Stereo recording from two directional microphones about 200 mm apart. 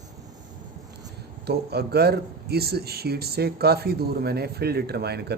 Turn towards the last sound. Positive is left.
turn(degrees=-55)  # may be behind; listen again after turning